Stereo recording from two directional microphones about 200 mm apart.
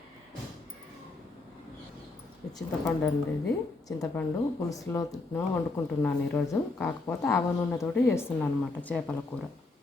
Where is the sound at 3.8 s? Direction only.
15° left (ahead or behind).